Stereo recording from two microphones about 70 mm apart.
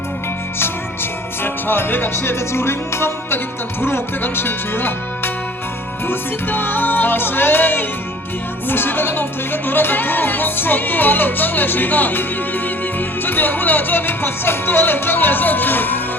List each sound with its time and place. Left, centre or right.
1.6 s music: left
8.7 s speech: left